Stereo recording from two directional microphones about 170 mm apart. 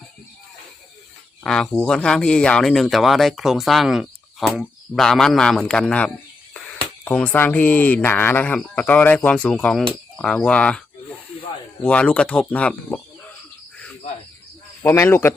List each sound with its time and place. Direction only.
1.5 s speech: 5° left (ahead or behind)
9.9 s cricket: 5° left (ahead or behind)
11.8 s speech: 5° left (ahead or behind)
14.8 s speech: 15° left (ahead or behind)